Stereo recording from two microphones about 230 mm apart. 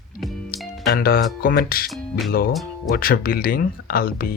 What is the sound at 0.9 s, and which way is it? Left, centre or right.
Speech, left.